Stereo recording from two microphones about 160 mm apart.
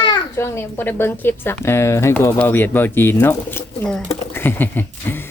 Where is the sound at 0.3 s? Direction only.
15° left (ahead or behind).